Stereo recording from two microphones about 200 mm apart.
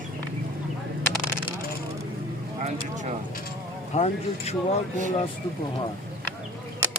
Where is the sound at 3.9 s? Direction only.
35° left (ahead or behind).